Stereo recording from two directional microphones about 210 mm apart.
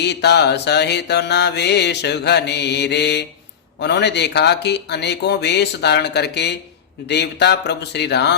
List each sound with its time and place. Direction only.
0.0 s mantra: 55° left (ahead or behind)